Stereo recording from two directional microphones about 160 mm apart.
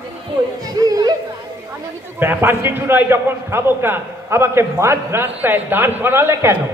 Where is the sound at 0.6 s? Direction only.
25° right (ahead or behind).